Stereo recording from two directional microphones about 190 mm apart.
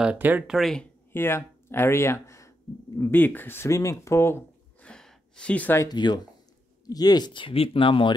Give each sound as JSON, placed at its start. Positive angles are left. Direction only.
{"t": 0.0, "sound": "speech", "side_deg": -10}